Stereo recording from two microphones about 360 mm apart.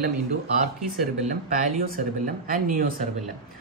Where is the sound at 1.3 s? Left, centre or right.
Right.